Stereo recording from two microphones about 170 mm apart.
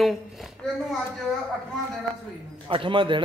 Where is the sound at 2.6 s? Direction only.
30° right (ahead or behind).